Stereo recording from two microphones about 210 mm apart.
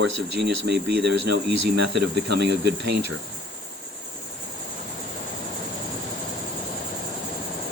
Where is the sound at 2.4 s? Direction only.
50° right (ahead or behind).